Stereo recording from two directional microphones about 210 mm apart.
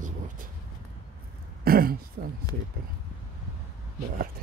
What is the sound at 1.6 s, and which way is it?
Throat clearing, 45° right (ahead or behind).